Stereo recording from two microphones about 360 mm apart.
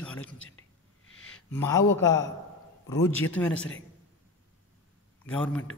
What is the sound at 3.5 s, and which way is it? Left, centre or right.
Speech, left.